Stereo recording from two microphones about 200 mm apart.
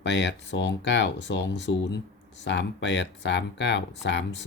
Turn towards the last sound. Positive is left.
turn(degrees=65)  # may be behind; listen again after turning